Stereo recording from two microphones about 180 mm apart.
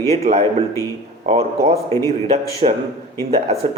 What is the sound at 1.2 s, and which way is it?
Speech, 35° right (ahead or behind).